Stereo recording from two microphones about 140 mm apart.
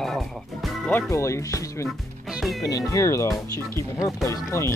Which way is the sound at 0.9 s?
20° left (ahead or behind).